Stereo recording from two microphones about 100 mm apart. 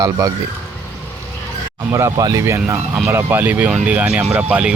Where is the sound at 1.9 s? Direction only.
30° right (ahead or behind).